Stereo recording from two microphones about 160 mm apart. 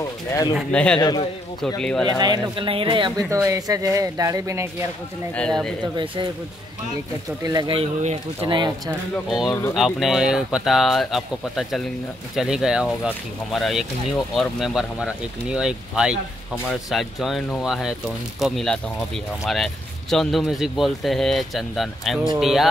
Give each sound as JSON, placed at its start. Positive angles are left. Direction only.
{"t": 0.7, "sound": "a man's voice", "side_deg": 5}
{"t": 2.1, "sound": "speech", "side_deg": -25}
{"t": 5.3, "sound": "speech", "side_deg": 5}
{"t": 7.4, "sound": "speech", "side_deg": -30}
{"t": 8.5, "sound": "speech", "side_deg": -25}
{"t": 9.3, "sound": "speech", "side_deg": 0}